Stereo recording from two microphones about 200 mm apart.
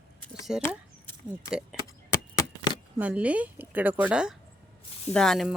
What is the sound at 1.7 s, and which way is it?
Chop, 5° right (ahead or behind).